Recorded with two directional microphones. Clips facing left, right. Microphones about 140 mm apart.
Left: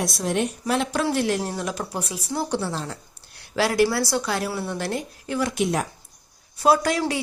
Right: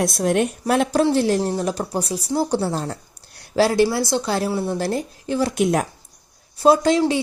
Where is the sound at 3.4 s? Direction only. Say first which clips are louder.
Right 4 dB; 30° right (ahead or behind).